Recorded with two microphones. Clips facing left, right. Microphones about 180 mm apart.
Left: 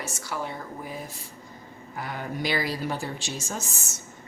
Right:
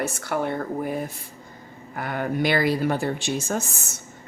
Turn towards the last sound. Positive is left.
turn(degrees=-55)  # may be behind; listen again after turning